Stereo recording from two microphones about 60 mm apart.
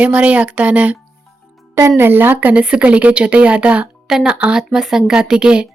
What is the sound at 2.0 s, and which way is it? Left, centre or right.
Speech, right.